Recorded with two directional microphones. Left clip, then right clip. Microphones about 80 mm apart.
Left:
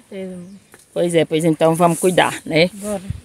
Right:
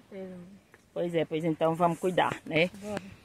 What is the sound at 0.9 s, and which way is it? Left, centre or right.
Speech, left.